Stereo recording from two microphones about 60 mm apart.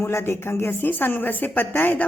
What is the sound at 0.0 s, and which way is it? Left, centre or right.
Speech, left.